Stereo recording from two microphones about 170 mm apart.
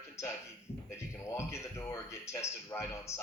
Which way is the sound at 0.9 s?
15° left (ahead or behind).